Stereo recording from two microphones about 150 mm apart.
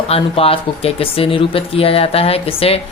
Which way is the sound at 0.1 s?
40° left (ahead or behind).